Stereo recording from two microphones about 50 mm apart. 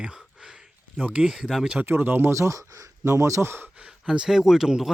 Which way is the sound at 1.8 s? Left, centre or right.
Right.